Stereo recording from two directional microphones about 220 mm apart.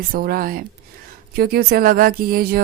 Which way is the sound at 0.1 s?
40° right (ahead or behind).